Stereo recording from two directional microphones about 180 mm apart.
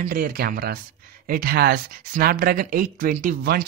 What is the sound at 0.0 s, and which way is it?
Speech, 50° right (ahead or behind).